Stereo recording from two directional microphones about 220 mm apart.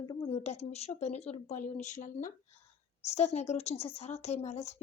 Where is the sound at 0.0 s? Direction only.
15° left (ahead or behind).